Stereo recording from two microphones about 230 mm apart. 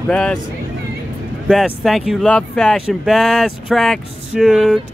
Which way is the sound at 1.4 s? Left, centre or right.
Centre.